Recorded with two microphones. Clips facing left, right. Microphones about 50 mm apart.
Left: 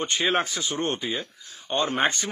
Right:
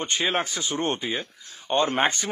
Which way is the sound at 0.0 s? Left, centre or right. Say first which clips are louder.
Left 1 dB; centre.